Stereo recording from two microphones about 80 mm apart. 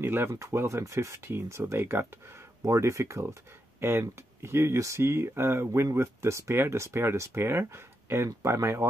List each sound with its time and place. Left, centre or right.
0.0 s speech: right
2.6 s speech: right